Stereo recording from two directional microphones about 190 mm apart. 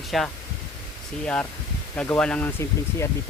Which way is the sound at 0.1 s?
Centre (ahead or behind).